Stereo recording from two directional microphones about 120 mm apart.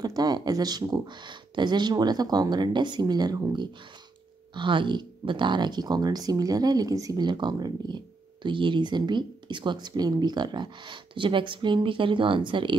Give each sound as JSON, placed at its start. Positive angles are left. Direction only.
{"t": 0.0, "sound": "speech", "side_deg": -35}